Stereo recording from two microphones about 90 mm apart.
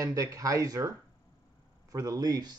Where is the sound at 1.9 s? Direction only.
40° right (ahead or behind).